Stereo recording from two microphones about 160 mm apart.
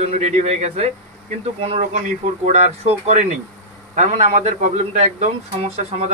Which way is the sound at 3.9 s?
50° right (ahead or behind).